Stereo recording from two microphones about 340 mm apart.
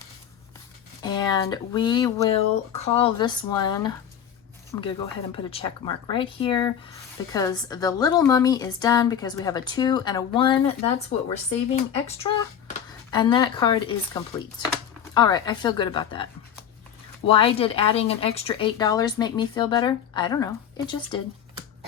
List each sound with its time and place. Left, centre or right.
1.0 s speech: centre